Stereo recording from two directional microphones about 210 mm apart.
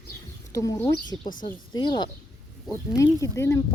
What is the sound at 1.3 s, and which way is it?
Speech, 40° left (ahead or behind).